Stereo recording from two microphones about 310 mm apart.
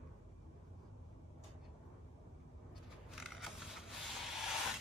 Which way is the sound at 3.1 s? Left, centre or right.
Centre.